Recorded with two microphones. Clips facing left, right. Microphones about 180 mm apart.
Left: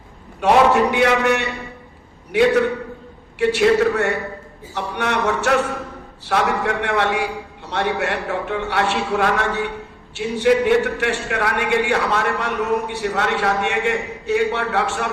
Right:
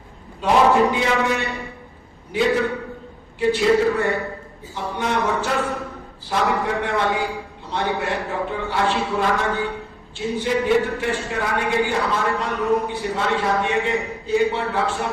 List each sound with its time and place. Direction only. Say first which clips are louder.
0.4 s a man's voice: left 2 dB; 70° left (ahead or behind)